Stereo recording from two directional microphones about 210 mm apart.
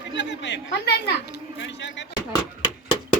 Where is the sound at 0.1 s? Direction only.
60° left (ahead or behind).